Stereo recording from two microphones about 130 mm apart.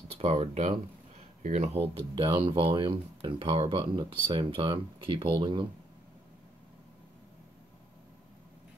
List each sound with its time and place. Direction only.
0.1 s speech: 50° right (ahead or behind); by 5.7 s 35° right (ahead or behind)